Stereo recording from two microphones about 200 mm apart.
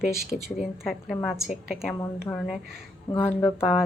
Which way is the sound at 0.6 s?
Centre (ahead or behind).